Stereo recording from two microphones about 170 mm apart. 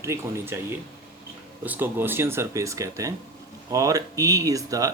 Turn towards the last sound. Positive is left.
turn(degrees=-20)  # may be behind; listen again after turning